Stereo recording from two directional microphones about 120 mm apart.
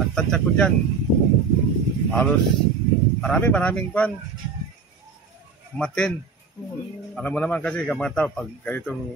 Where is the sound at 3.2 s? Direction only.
5° left (ahead or behind).